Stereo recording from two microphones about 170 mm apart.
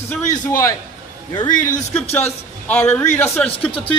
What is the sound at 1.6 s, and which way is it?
Speech, 45° left (ahead or behind).